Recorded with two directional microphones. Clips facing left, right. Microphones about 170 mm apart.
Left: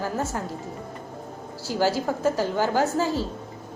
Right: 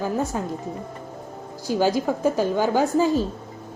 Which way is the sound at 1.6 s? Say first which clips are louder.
Right 3 dB; 15° right (ahead or behind).